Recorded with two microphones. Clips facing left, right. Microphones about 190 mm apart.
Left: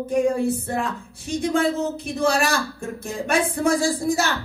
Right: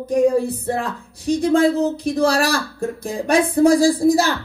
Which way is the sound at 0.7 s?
35° right (ahead or behind).